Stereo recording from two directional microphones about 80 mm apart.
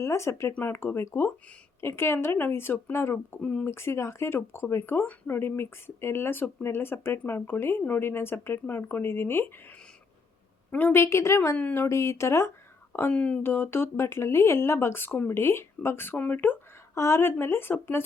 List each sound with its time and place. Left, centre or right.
0.0 s a woman's voice: left
3.4 s speech: centre
3.7 s speech: left
10.7 s a woman's voice: centre
10.9 s a woman's voice: left
13.1 s speech: centre
13.4 s speech: left